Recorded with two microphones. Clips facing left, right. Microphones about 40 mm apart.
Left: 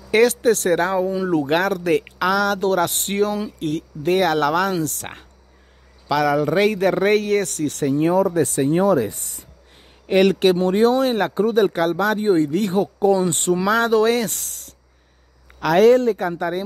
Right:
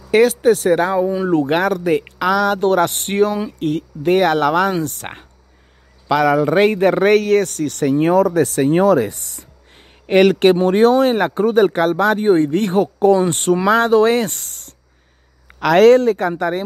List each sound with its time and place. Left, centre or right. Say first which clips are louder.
0.1 s speech: right 3 dB; centre
1.2 s speech: right 4 dB; right
1.5 s speech: right 2 dB; centre; by 7.1 s right
7.1 s speech: right 4 dB; right
8.2 s speech: right 4 dB; right
9.8 s a sound: right 4 dB; right
10.4 s speech: right 4 dB; right
13.3 s speech: right 4 dB; right
13.6 s speech: right 4 dB; right
15.6 s speech: right 4 dB; right